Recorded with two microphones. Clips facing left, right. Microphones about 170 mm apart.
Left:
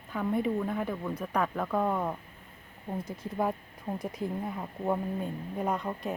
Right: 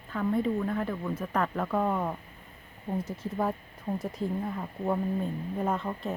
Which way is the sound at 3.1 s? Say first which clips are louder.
Left 2 dB; 10° left (ahead or behind).